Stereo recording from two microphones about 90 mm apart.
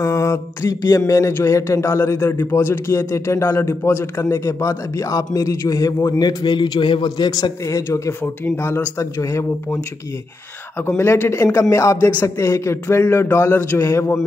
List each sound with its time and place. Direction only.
0.0 s a man's voice: 35° left (ahead or behind)
6.0 s a man's voice: 50° left (ahead or behind); by 9.8 s 35° left (ahead or behind)
11.0 s a man's voice: 30° left (ahead or behind)